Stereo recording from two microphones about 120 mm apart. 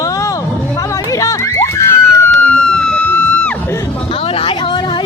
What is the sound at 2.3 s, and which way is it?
Music, 5° left (ahead or behind).